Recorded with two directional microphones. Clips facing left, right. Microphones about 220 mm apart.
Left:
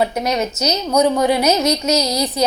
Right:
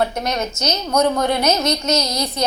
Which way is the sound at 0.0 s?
10° left (ahead or behind).